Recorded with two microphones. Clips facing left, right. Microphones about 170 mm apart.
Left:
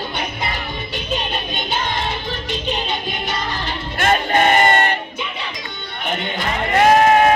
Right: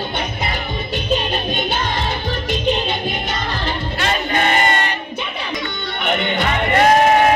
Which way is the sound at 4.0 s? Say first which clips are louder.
Left 4 dB; 45° left (ahead or behind).